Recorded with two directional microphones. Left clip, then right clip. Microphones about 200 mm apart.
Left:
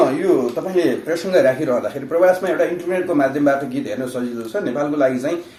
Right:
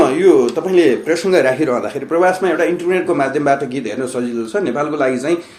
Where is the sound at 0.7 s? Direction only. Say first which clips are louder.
Right 6 dB; 50° right (ahead or behind).